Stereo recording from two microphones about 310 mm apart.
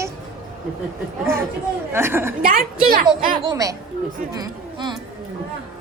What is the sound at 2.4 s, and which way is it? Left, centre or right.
Speech, right.